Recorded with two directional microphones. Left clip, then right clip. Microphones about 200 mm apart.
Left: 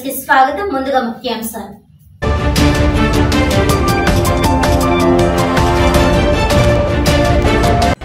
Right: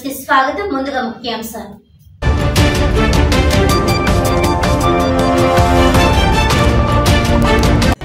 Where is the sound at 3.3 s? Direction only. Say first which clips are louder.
Even; centre (ahead or behind).